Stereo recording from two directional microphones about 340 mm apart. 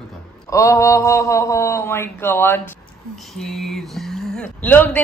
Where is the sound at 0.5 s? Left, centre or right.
Centre.